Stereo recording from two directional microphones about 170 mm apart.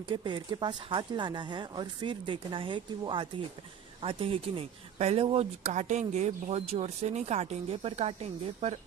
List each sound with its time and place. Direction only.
0.1 s speech: 25° right (ahead or behind)